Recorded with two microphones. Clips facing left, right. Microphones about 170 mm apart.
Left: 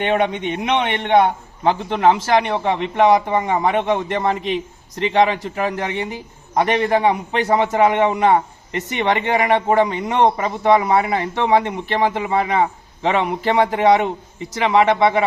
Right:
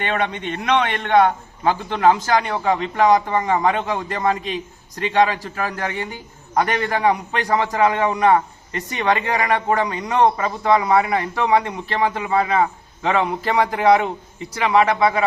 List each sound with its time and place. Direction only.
0.1 s a man's voice: 15° left (ahead or behind)